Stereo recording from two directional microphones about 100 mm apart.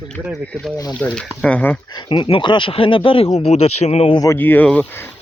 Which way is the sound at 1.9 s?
55° left (ahead or behind).